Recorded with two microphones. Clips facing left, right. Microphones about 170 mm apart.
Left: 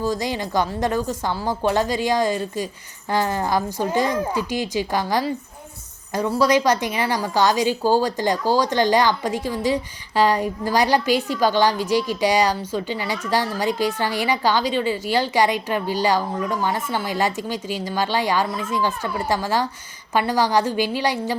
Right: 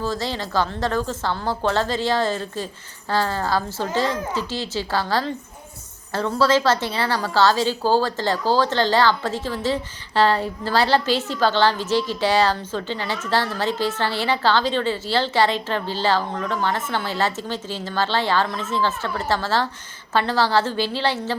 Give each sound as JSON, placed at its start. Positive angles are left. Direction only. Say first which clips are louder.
{"t": 0.0, "sound": "a woman's voice", "louder": "left 2 dB", "side_deg": 15}